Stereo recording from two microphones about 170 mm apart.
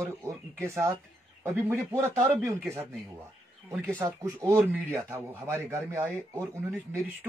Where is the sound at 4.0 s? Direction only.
15° right (ahead or behind).